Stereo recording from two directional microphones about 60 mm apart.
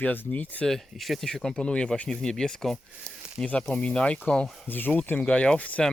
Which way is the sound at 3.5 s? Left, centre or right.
Left.